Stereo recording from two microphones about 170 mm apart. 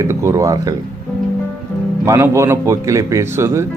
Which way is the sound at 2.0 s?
20° right (ahead or behind).